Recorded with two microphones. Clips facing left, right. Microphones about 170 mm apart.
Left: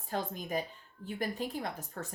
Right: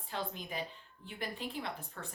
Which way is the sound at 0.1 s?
45° left (ahead or behind).